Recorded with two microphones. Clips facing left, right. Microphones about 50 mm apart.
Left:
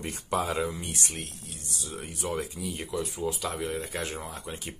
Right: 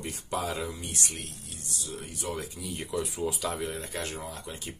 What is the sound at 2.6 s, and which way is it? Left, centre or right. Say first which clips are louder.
Speech: left 2 dB; centre.